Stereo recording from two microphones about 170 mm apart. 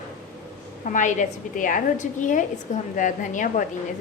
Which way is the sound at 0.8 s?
50° left (ahead or behind).